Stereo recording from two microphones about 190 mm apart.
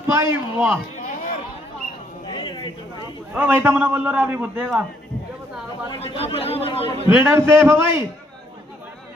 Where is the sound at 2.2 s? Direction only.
25° left (ahead or behind).